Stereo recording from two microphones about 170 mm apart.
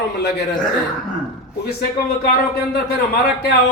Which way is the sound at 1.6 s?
65° left (ahead or behind).